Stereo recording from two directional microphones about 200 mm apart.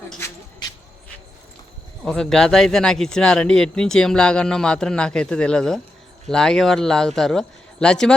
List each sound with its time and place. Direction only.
2.0 s speech: centre (ahead or behind)